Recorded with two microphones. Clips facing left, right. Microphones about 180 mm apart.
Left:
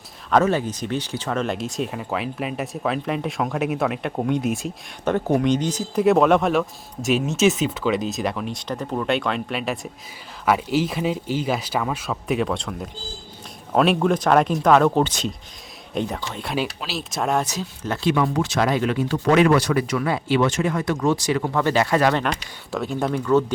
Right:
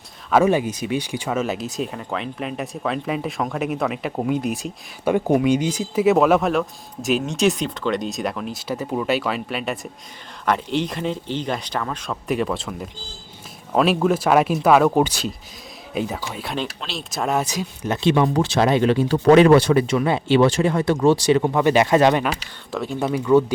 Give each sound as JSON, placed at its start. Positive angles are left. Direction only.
{"t": 0.3, "sound": "speech", "side_deg": -10}
{"t": 17.4, "sound": "speech", "side_deg": -15}
{"t": 22.2, "sound": "speech", "side_deg": -5}